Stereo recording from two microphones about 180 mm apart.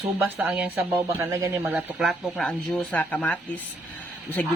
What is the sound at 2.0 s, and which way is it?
Speech, centre (ahead or behind).